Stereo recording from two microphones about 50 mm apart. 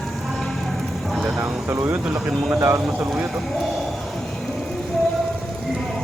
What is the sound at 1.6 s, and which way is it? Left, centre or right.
Speech, right.